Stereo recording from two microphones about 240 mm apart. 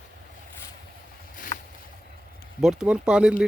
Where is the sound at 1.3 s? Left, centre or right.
Left.